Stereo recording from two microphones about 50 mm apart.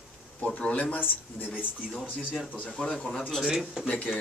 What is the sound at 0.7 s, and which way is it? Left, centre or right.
Speech, left.